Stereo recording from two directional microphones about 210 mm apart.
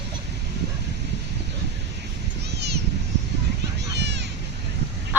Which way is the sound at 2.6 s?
50° right (ahead or behind).